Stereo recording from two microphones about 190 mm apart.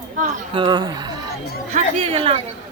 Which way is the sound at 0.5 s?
25° right (ahead or behind).